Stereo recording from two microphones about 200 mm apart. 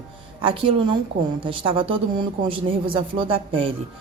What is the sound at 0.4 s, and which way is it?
Speech, 25° right (ahead or behind).